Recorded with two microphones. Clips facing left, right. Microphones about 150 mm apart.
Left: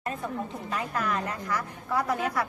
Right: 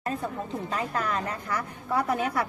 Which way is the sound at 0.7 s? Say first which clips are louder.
Even; 30° right (ahead or behind).